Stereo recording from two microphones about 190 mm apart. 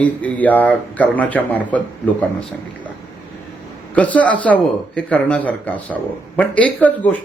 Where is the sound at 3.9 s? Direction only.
5° left (ahead or behind).